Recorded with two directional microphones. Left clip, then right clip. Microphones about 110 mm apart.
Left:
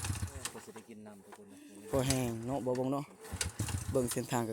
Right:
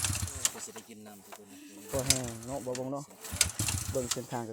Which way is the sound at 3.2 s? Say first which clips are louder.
Right 8 dB; 20° right (ahead or behind).